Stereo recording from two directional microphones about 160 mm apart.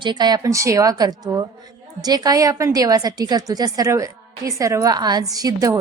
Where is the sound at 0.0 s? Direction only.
25° right (ahead or behind).